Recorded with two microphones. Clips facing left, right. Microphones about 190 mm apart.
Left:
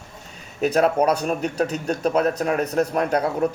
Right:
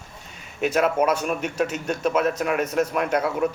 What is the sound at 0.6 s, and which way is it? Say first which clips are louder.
A man's voice: left 2 dB; 35° left (ahead or behind).